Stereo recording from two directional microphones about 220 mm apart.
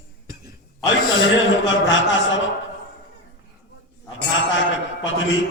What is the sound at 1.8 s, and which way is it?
Speech, 60° left (ahead or behind).